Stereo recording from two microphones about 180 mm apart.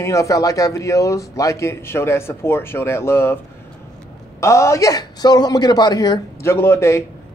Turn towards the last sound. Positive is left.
turn(degrees=15)  # may be behind; listen again after turning